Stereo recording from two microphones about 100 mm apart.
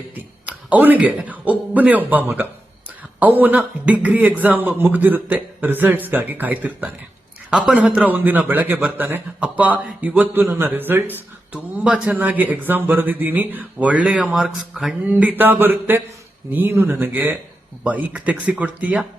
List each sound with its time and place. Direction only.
0.4 s a man's voice: 15° right (ahead or behind)
15.0 s a sound: 15° right (ahead or behind)
17.8 s a man's voice: 15° right (ahead or behind)